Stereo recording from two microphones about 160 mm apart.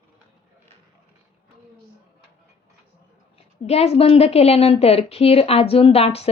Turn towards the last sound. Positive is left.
turn(degrees=40)  # may be behind; listen again after turning